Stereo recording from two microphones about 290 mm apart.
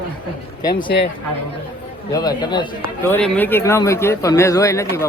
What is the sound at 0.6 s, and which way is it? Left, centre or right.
Speech, centre.